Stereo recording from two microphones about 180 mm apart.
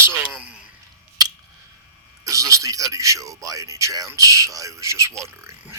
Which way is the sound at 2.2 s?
15° right (ahead or behind).